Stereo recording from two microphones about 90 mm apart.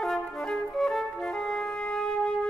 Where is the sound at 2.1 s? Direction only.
10° left (ahead or behind).